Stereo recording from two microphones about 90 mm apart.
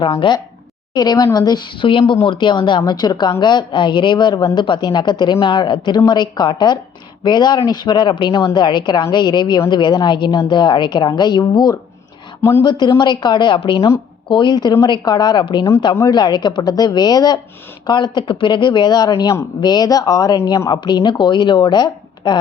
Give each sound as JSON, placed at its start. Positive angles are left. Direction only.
{"t": 0.0, "sound": "a woman's voice", "side_deg": 65}
{"t": 0.9, "sound": "speech", "side_deg": 50}
{"t": 1.8, "sound": "a woman's voice", "side_deg": 70}
{"t": 12.4, "sound": "speech", "side_deg": 30}
{"t": 12.6, "sound": "a woman's voice", "side_deg": 60}
{"t": 14.3, "sound": "a woman's voice", "side_deg": 60}
{"t": 17.8, "sound": "a woman's voice", "side_deg": 55}
{"t": 20.7, "sound": "a woman's voice", "side_deg": 55}